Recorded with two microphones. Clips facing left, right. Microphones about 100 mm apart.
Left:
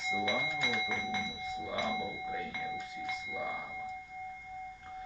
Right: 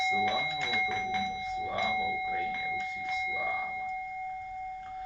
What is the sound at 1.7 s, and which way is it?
Doorbell, 20° left (ahead or behind).